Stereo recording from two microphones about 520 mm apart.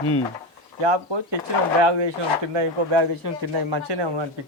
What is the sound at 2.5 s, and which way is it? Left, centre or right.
Speech, right.